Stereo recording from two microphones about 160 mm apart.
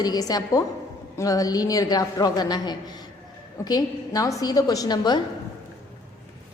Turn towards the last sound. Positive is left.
turn(degrees=25)  # may be behind; listen again after turning